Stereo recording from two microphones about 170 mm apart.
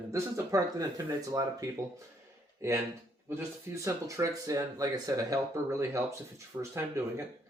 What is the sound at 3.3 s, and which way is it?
Speech, 15° right (ahead or behind).